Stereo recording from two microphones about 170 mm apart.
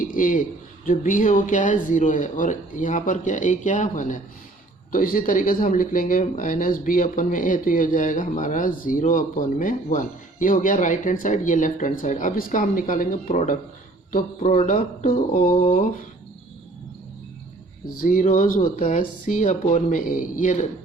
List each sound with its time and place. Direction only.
0.0 s a man's voice: 50° left (ahead or behind)
18.0 s speech: 50° left (ahead or behind)